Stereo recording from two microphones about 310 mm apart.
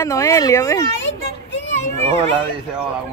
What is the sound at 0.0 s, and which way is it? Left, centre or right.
Speech, centre.